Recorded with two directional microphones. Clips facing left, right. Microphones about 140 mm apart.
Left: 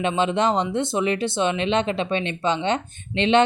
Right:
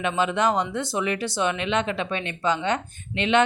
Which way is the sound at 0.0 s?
25° left (ahead or behind).